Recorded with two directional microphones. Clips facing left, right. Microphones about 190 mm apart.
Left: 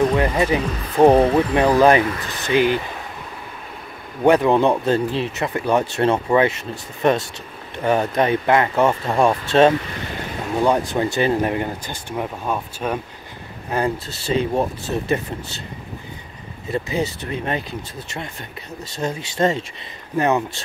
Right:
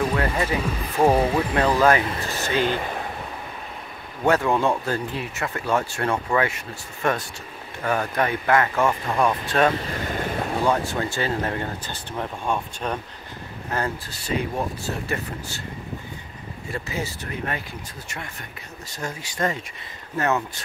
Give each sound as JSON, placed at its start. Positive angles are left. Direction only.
{"t": 0.1, "sound": "speech", "side_deg": 20}
{"t": 4.2, "sound": "speech", "side_deg": 15}
{"t": 14.1, "sound": "speech", "side_deg": 25}
{"t": 16.7, "sound": "speech", "side_deg": 20}